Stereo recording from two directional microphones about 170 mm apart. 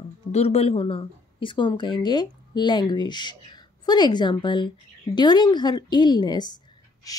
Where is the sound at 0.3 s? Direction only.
40° left (ahead or behind).